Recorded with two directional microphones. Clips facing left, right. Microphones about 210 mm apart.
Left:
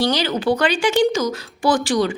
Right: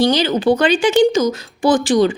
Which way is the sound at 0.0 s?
20° right (ahead or behind).